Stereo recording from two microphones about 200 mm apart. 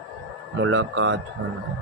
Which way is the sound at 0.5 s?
65° right (ahead or behind).